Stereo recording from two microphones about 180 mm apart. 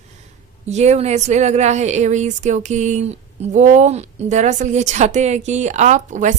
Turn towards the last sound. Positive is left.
turn(degrees=-45)  # may be behind; listen again after turning